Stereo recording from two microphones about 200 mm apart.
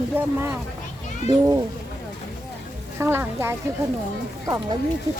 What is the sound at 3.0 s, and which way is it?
Speech, 10° right (ahead or behind).